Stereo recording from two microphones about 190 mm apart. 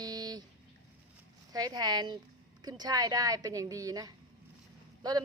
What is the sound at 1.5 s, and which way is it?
A woman's voice, 20° right (ahead or behind).